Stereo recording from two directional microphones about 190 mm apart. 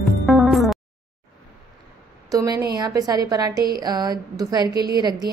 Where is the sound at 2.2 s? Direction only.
20° right (ahead or behind).